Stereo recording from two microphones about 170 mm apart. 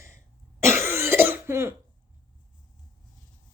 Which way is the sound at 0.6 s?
15° right (ahead or behind).